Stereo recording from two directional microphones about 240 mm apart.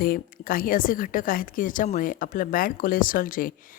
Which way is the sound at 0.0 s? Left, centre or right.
Left.